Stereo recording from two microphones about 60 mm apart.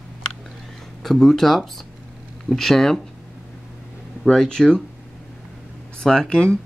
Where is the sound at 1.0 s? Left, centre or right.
Centre.